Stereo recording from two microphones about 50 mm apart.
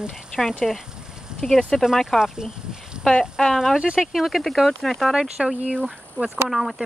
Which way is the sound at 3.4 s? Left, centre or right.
Centre.